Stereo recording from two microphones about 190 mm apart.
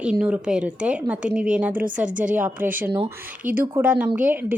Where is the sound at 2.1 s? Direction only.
45° right (ahead or behind).